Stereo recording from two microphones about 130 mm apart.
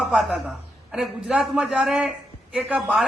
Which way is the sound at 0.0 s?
Centre (ahead or behind).